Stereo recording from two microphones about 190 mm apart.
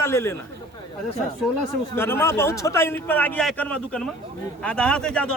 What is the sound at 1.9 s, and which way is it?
A man's voice, 10° left (ahead or behind).